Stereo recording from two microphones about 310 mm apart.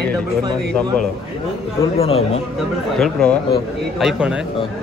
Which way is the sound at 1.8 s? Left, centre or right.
Centre.